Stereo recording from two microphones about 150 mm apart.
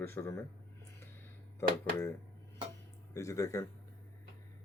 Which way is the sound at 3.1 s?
20° left (ahead or behind).